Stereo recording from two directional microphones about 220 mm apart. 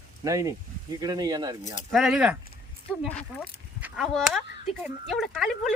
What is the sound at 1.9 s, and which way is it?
A man's voice, centre (ahead or behind).